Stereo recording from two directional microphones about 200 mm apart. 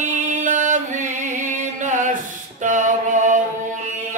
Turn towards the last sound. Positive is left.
turn(degrees=-40)  # may be behind; listen again after turning